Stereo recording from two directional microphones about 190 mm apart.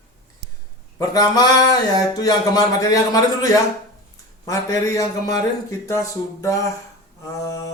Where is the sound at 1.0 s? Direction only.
20° left (ahead or behind).